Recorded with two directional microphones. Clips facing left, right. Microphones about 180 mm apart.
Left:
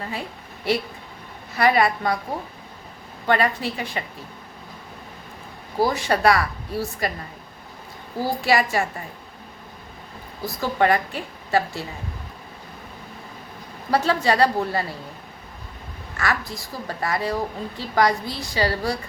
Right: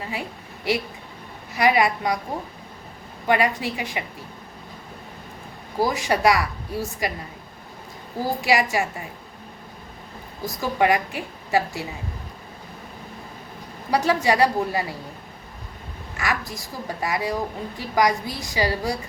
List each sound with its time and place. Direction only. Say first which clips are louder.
0.0 s a woman's voice: even; 15° right (ahead or behind)
3.2 s a woman's voice: even; 15° right (ahead or behind)
5.9 s a woman's voice: even; 15° right (ahead or behind)
8.4 s a woman's voice: even; 15° right (ahead or behind)
10.4 s a woman's voice: even; 15° right (ahead or behind)
13.9 s a woman's voice: even; 15° right (ahead or behind)
16.1 s a woman's voice: left 1 dB; 15° right (ahead or behind)